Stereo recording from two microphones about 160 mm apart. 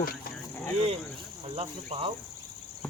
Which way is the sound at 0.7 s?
40° right (ahead or behind).